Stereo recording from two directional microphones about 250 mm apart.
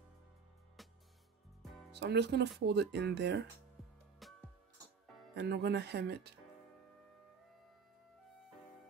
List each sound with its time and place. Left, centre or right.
0.8 s music: centre
2.0 s speech: right
4.2 s music: centre
5.3 s speech: right